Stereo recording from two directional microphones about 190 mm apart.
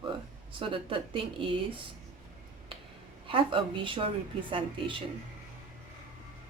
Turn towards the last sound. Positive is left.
turn(degrees=-25)  # may be behind; listen again after turning